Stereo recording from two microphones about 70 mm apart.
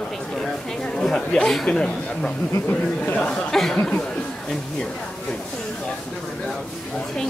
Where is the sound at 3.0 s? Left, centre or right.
Left.